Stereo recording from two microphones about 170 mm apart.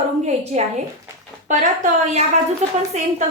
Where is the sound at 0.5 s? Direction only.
45° right (ahead or behind).